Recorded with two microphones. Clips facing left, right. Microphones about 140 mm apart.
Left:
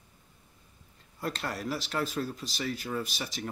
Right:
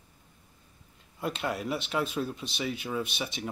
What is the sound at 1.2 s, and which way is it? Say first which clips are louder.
Speech: right 3 dB; 5° right (ahead or behind).